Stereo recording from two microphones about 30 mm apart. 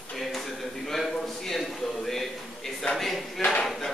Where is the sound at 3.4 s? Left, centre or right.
Left.